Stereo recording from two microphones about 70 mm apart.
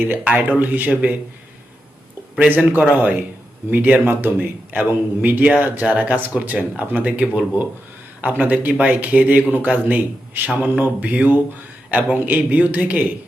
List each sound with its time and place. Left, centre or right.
0.3 s a man's voice: right
2.4 s a man's voice: right